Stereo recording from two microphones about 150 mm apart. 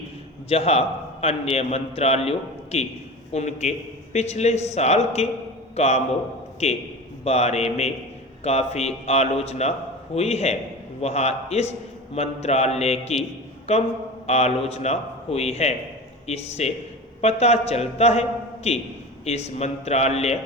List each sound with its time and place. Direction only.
0.4 s a man's voice: 40° left (ahead or behind)